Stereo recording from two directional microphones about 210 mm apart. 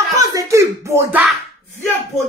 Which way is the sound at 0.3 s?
15° right (ahead or behind).